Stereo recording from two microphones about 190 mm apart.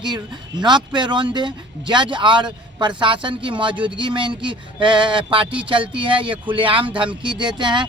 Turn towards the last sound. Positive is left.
turn(degrees=-25)  # may be behind; listen again after turning